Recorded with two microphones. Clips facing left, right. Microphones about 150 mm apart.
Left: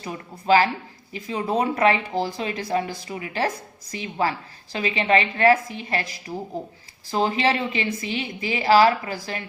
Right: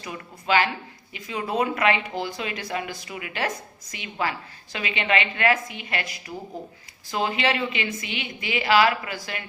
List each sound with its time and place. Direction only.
0.0 s a woman's voice: 35° left (ahead or behind)